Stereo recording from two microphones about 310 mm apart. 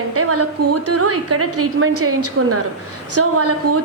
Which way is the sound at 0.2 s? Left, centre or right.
Right.